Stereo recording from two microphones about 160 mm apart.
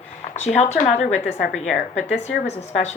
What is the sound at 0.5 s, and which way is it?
Speech, 45° left (ahead or behind).